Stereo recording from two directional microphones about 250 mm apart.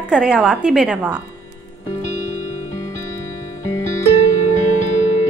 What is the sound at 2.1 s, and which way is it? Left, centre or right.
Music, left.